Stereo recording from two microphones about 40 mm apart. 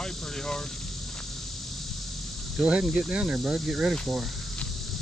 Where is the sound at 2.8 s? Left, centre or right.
Centre.